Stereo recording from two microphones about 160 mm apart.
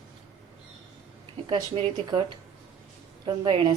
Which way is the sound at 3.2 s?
30° right (ahead or behind).